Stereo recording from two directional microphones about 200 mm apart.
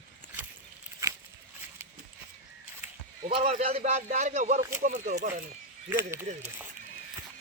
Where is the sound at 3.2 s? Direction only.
30° right (ahead or behind).